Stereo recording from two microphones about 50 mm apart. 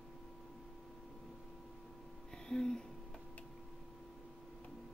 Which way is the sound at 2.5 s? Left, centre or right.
Centre.